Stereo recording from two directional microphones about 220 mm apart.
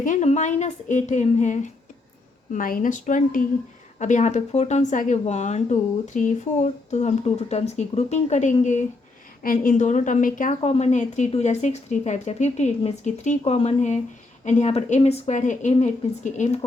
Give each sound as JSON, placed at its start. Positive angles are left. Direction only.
{"t": 0.0, "sound": "a woman's voice", "side_deg": 35}